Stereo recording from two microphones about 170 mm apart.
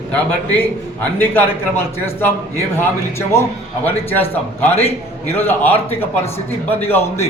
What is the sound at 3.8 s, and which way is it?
Speech, 10° left (ahead or behind).